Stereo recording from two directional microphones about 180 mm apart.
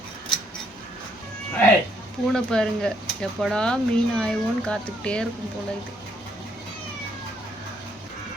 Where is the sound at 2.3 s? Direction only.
5° left (ahead or behind).